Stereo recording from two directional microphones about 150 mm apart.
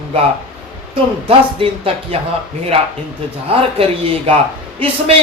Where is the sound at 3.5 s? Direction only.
40° right (ahead or behind).